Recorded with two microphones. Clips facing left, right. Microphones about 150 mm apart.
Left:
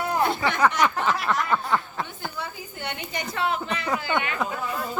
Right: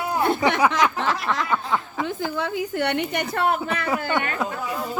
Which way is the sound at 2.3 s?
90° right.